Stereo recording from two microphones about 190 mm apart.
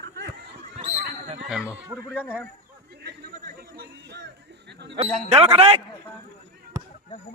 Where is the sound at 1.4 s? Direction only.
5° right (ahead or behind).